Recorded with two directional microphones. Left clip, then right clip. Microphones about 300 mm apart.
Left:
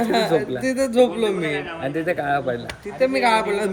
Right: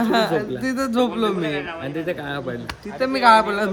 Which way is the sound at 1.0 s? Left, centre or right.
Right.